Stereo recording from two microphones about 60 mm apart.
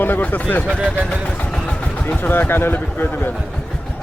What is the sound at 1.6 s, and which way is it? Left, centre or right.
Vehicle, centre.